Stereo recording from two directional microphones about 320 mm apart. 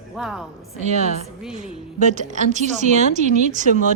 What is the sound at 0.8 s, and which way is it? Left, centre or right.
A woman's voice, right.